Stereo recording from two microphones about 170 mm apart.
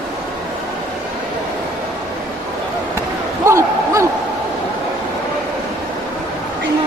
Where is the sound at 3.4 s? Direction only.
20° right (ahead or behind).